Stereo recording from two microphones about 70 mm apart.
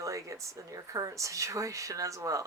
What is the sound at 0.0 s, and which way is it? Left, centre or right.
Speech, right.